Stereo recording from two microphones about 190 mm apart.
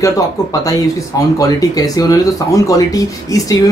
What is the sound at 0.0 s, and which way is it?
Speech, 20° left (ahead or behind).